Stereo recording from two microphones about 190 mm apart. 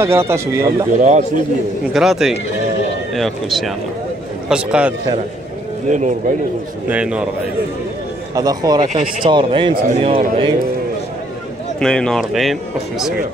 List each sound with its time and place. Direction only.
0.0 s speech: 15° right (ahead or behind)
0.9 s speech: 40° right (ahead or behind)
2.0 s speech: centre (ahead or behind)
5.9 s speech: 40° right (ahead or behind)
6.9 s speech: 5° right (ahead or behind)
8.4 s speech: 20° right (ahead or behind)
8.8 s speech: 40° right (ahead or behind)
9.2 s speech: 25° right (ahead or behind)
9.8 s a man's voice: 45° right (ahead or behind)
11.8 s speech: 5° left (ahead or behind)